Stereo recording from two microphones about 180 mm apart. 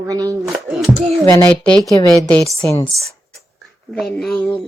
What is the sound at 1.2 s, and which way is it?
Speech, 10° left (ahead or behind).